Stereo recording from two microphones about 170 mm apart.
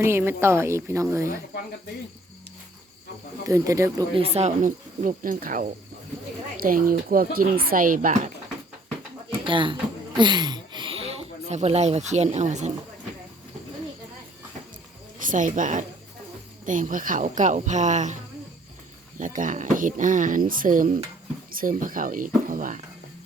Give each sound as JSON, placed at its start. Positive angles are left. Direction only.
{"t": 0.0, "sound": "a woman's voice", "side_deg": -15}
{"t": 3.4, "sound": "speech", "side_deg": -20}
{"t": 4.1, "sound": "speech", "side_deg": -35}
{"t": 9.4, "sound": "speech", "side_deg": -30}
{"t": 15.2, "sound": "speech", "side_deg": -50}
{"t": 19.2, "sound": "speech", "side_deg": -50}